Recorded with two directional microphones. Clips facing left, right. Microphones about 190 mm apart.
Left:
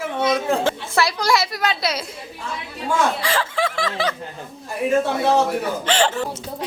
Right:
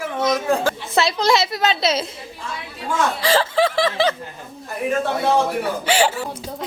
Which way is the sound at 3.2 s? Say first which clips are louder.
Right 5 dB; 30° right (ahead or behind).